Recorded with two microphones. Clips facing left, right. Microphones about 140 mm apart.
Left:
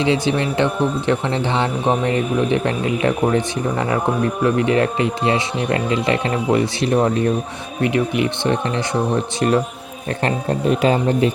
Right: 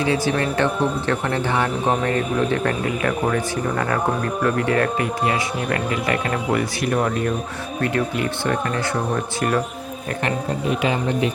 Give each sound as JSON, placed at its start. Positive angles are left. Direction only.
{"t": 0.0, "sound": "speech", "side_deg": 20}
{"t": 10.8, "sound": "speech", "side_deg": 35}